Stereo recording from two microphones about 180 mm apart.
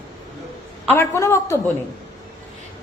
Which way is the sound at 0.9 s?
15° left (ahead or behind).